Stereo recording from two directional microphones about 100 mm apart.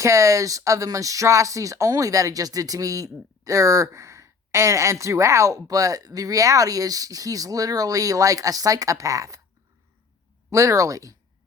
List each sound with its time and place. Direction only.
0.0 s speech: 30° right (ahead or behind)
10.5 s speech: 35° right (ahead or behind)